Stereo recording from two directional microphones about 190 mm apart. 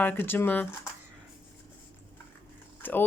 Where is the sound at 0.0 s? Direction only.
10° left (ahead or behind).